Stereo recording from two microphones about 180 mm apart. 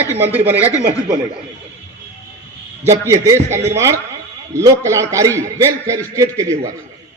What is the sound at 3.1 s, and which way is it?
A man's voice, 15° right (ahead or behind).